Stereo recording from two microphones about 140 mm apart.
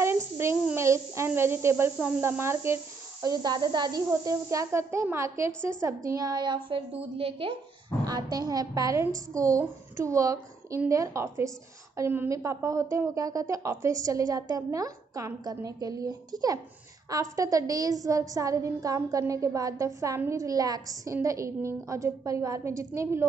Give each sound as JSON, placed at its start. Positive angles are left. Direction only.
{"t": 0.0, "sound": "a sound", "side_deg": -20}
{"t": 0.7, "sound": "a woman's voice", "side_deg": -20}
{"t": 8.0, "sound": "a woman's voice", "side_deg": -30}